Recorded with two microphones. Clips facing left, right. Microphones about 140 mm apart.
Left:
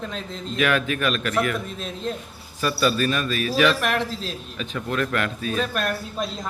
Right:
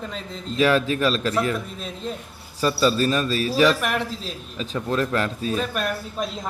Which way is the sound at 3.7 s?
5° right (ahead or behind).